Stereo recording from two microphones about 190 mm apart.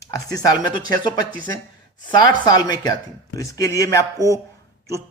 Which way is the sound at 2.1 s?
20° left (ahead or behind).